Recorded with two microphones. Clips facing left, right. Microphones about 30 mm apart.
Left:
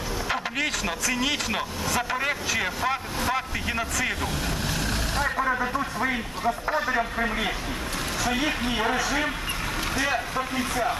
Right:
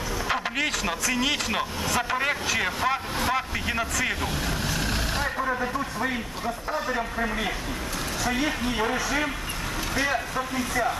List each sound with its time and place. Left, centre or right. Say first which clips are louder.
0.3 s speech: right 1 dB; centre
4.7 s vehicle: even; centre
5.4 s a man's voice: left 2 dB; centre
10.0 s a man's voice: even; centre